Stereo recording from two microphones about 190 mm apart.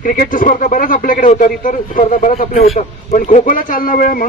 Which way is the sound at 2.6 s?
35° left (ahead or behind).